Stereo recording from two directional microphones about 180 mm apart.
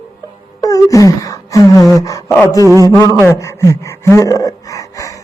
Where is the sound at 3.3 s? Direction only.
15° left (ahead or behind).